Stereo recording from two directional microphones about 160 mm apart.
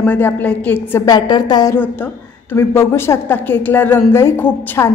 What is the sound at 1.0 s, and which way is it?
A woman's voice, 25° left (ahead or behind).